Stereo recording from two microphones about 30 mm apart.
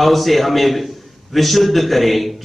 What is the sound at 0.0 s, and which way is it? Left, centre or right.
A man's voice, centre.